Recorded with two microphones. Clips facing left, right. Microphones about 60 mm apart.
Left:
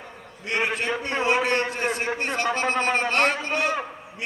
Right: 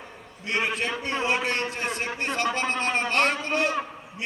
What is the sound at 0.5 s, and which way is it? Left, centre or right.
Speech, centre.